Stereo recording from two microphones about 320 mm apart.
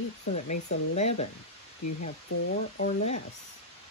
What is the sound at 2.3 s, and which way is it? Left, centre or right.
Speech, left.